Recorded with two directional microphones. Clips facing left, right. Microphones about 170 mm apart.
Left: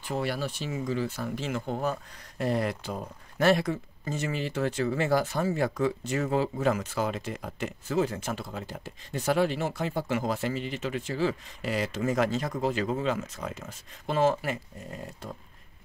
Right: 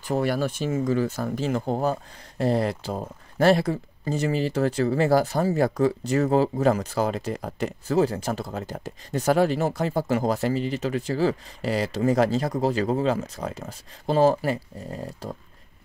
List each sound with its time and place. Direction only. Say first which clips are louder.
0.1 s speech: right 6 dB; 45° right (ahead or behind)